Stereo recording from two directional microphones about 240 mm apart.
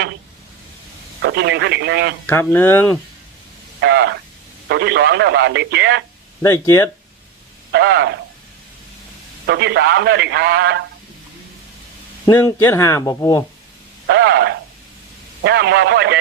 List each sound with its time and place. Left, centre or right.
1.2 s a man's voice: right
2.2 s speech: centre
3.8 s a man's voice: right
6.4 s speech: centre
7.7 s a man's voice: right
9.5 s a man's voice: right
12.2 s speech: centre
14.1 s radio: right
15.4 s a man's voice: right